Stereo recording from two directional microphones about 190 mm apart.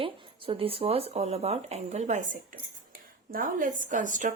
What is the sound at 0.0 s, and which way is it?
Speech, 30° right (ahead or behind).